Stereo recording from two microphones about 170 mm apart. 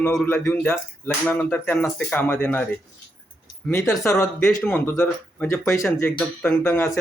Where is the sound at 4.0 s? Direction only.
15° left (ahead or behind).